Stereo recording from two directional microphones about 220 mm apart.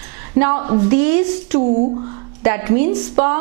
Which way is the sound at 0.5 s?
25° right (ahead or behind).